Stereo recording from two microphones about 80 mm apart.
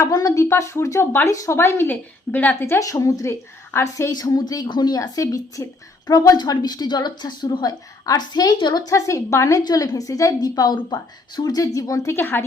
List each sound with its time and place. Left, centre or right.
0.1 s a woman's voice: left
0.4 s a woman's voice: left
2.8 s a woman's voice: left
4.1 s a woman's voice: left
4.7 s speech: left
4.9 s a woman's voice: left
8.0 s a woman's voice: left